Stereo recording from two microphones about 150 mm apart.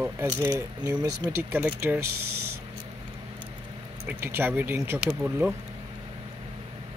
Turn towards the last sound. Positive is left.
turn(degrees=-10)  # may be behind; listen again after turning